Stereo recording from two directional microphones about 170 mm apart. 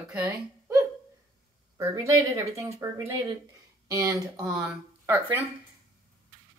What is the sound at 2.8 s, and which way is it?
Speech, 20° right (ahead or behind).